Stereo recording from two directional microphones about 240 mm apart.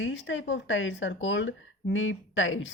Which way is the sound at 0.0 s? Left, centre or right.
Left.